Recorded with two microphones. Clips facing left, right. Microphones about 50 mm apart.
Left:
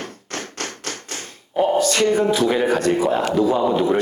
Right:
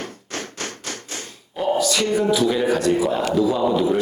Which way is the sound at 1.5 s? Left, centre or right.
Left.